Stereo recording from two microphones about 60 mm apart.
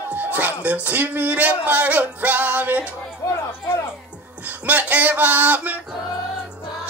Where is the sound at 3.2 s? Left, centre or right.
Left.